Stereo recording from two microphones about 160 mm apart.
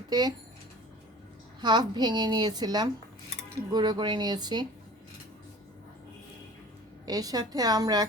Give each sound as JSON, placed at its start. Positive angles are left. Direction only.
{"t": 0.1, "sound": "a woman's voice", "side_deg": -25}
{"t": 1.6, "sound": "a woman's voice", "side_deg": -30}
{"t": 7.0, "sound": "a woman's voice", "side_deg": -25}